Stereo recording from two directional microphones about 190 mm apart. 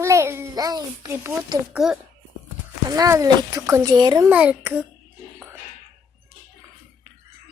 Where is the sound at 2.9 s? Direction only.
15° right (ahead or behind).